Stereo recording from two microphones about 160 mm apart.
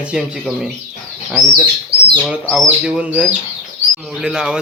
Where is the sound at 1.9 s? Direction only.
35° right (ahead or behind).